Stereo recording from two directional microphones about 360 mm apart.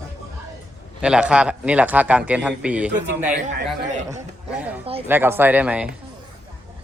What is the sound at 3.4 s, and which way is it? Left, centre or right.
A woman's voice, centre.